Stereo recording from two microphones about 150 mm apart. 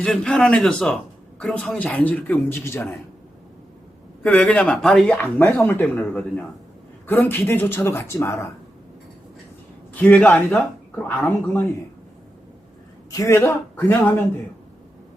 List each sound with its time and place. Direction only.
0.0 s a man's voice: 5° left (ahead or behind)
4.2 s speech: 5° left (ahead or behind)
9.9 s speech: 10° left (ahead or behind)
13.1 s a man's voice: 20° left (ahead or behind)